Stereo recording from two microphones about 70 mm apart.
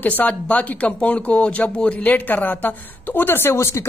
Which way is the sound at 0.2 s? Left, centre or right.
Left.